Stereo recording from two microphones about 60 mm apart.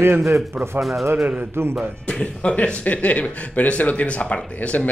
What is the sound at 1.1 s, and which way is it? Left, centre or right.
Speech, right.